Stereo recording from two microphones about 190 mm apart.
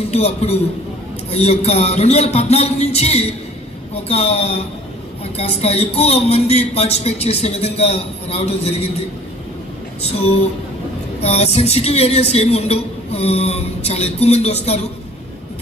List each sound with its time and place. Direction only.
0.1 s speech: 35° left (ahead or behind)
10.0 s speech: 30° left (ahead or behind)